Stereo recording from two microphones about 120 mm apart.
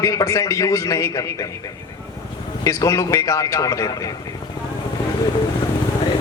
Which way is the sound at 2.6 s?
25° left (ahead or behind).